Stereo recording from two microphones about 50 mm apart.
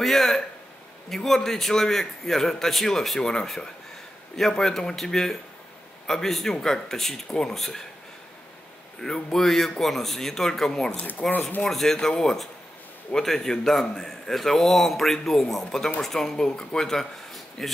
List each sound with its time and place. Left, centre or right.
0.0 s a man's voice: centre
9.0 s a man's voice: centre
10.9 s speech: left
11.6 s a man's voice: centre